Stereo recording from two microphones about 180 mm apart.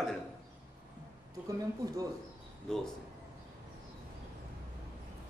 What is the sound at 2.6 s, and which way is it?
Speech, centre (ahead or behind).